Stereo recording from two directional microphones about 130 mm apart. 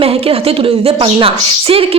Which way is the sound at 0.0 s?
50° right (ahead or behind).